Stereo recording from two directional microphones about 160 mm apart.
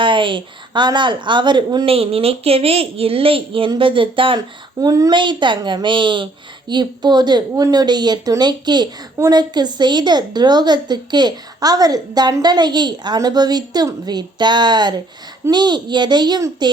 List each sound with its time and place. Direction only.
0.0 s speech: 30° right (ahead or behind)